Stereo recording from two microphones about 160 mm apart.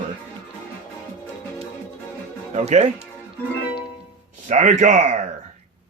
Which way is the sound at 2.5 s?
45° right (ahead or behind).